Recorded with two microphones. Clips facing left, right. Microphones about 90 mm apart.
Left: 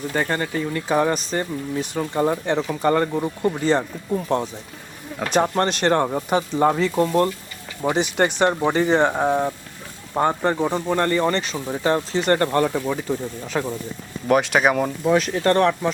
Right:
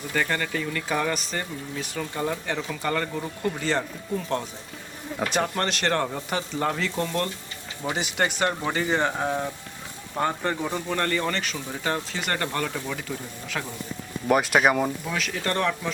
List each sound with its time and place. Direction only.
0.1 s speech: 25° left (ahead or behind)
11.8 s speech: 35° left (ahead or behind)
14.3 s speech: centre (ahead or behind)
15.0 s speech: 35° left (ahead or behind)